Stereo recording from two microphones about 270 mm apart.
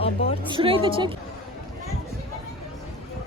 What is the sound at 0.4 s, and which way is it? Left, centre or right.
Speech, centre.